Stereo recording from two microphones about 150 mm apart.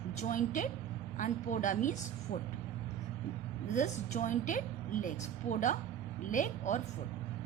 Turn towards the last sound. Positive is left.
turn(degrees=55)  # may be behind; listen again after turning